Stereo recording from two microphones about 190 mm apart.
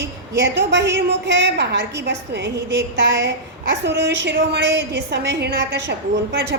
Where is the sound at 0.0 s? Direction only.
70° right (ahead or behind).